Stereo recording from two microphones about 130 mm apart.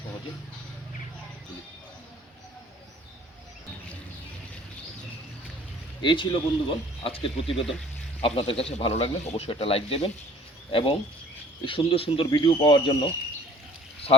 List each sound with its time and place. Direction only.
6.0 s speech: 40° left (ahead or behind)